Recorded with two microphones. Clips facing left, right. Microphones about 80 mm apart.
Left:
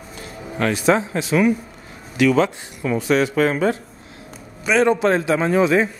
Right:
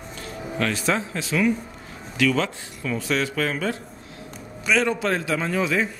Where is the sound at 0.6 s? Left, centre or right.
Centre.